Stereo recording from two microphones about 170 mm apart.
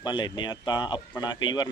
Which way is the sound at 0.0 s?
25° left (ahead or behind).